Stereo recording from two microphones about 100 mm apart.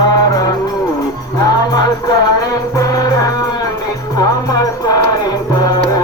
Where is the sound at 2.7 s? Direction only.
35° left (ahead or behind).